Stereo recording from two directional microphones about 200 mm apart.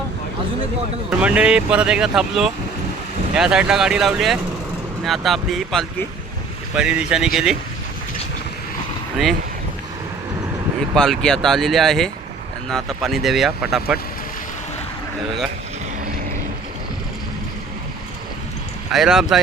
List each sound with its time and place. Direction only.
1.2 s speech: 5° right (ahead or behind)
10.9 s speech: centre (ahead or behind)
18.9 s speech: centre (ahead or behind)